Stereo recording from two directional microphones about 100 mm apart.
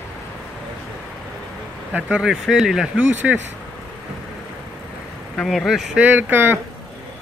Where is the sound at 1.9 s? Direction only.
10° right (ahead or behind).